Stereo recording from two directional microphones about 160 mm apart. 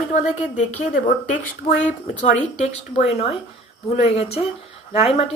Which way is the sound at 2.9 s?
40° left (ahead or behind).